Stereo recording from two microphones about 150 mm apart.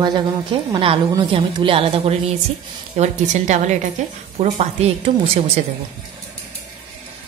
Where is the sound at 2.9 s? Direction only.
50° right (ahead or behind).